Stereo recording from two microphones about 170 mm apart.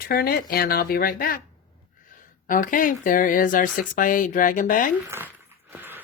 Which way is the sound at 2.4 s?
55° left (ahead or behind).